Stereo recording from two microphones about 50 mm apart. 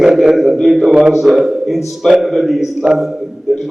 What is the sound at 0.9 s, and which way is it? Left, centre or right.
Speech, centre.